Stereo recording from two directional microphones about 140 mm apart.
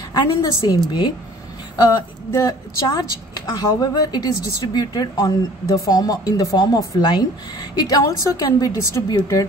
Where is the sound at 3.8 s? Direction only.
25° left (ahead or behind).